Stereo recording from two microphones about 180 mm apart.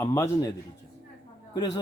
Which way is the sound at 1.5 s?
25° left (ahead or behind).